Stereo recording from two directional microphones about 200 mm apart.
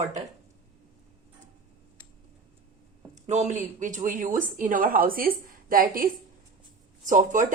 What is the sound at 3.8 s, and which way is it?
Speech, 40° right (ahead or behind).